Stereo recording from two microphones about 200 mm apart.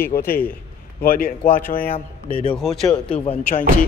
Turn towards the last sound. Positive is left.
turn(degrees=30)  # may be behind; listen again after turning